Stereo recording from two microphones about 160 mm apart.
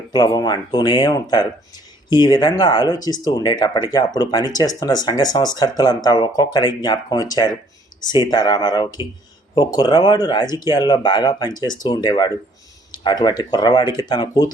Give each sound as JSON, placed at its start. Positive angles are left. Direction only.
{"t": 0.1, "sound": "speech", "side_deg": 25}